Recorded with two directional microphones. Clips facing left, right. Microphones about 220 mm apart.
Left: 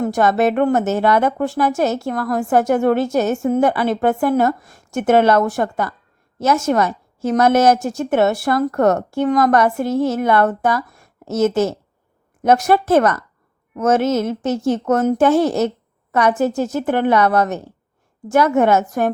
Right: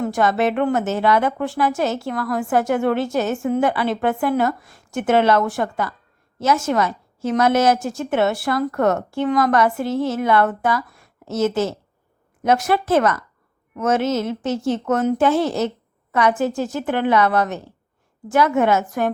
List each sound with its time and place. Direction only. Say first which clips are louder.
0.0 s a woman's voice: left 3 dB; 45° left (ahead or behind)